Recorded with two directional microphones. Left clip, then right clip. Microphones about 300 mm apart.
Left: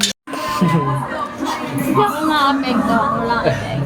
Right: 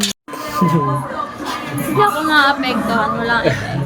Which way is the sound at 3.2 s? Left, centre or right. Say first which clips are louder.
Right 1 dB; centre.